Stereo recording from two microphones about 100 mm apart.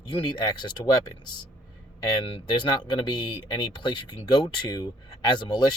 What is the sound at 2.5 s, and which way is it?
Speech, 50° left (ahead or behind).